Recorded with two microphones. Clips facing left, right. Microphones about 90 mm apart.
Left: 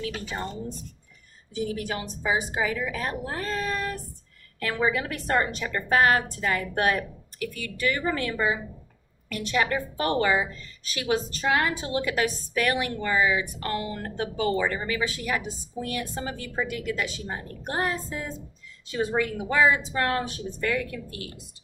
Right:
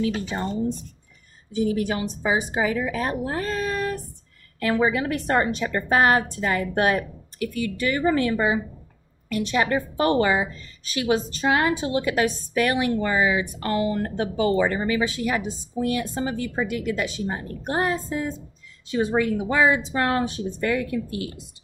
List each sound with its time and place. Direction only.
0.0 s a woman's voice: 25° right (ahead or behind)
1.5 s a woman's voice: 20° right (ahead or behind)